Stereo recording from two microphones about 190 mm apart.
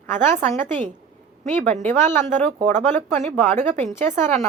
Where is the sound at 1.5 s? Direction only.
10° left (ahead or behind).